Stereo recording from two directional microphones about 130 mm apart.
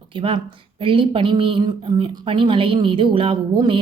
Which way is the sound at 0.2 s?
45° right (ahead or behind).